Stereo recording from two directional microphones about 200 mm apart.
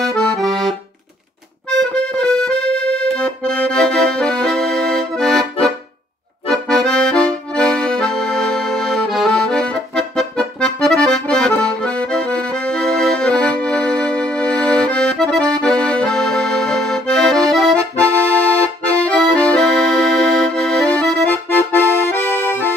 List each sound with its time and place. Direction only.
0.0 s accordion: centre (ahead or behind)
1.8 s accordion: 5° left (ahead or behind)